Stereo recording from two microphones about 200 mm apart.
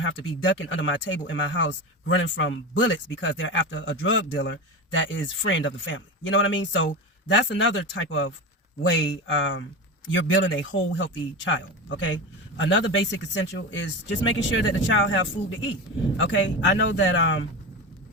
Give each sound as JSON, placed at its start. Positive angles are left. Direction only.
{"t": 0.0, "sound": "speech", "side_deg": 70}